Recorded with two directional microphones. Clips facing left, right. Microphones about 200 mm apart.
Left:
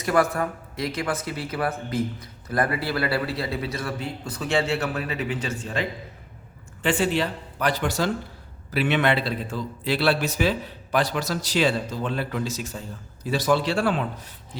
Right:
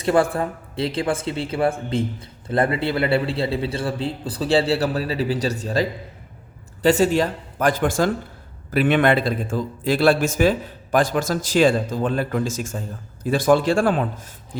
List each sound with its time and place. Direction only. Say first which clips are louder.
0.0 s a man's voice: right 3 dB; 30° right (ahead or behind); by 14.6 s 50° right (ahead or behind)